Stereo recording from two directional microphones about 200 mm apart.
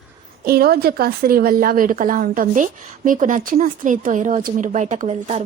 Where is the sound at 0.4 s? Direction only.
50° right (ahead or behind).